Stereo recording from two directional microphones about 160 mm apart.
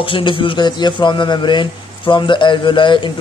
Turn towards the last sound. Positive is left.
turn(degrees=30)  # may be behind; listen again after turning